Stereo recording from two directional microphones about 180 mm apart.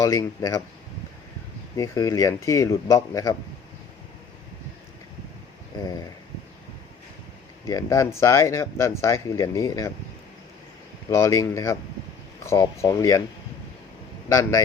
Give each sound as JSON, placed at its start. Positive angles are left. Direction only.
{"t": 0.0, "sound": "speech", "side_deg": 20}
{"t": 1.7, "sound": "speech", "side_deg": 20}
{"t": 7.7, "sound": "speech", "side_deg": 20}
{"t": 11.1, "sound": "speech", "side_deg": 15}
{"t": 14.3, "sound": "speech", "side_deg": 15}